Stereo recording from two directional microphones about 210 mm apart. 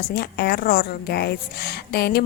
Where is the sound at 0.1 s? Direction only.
50° left (ahead or behind).